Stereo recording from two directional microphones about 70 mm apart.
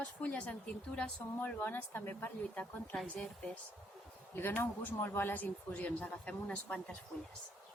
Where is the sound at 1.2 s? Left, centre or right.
Left.